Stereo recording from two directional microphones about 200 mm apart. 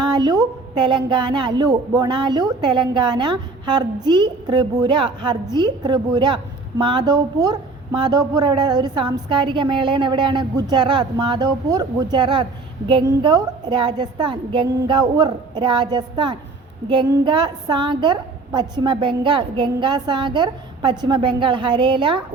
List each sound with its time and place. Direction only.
0.0 s a woman's voice: 20° right (ahead or behind)